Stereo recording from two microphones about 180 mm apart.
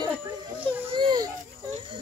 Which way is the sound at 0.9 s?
25° right (ahead or behind).